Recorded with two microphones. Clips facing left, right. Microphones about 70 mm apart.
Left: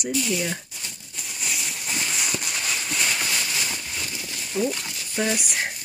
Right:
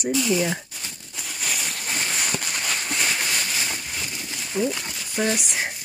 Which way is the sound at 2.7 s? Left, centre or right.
Right.